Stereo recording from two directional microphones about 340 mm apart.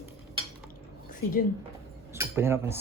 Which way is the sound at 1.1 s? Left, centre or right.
Left.